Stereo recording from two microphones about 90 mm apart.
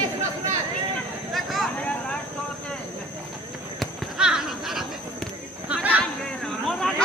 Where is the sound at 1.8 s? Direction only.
15° left (ahead or behind).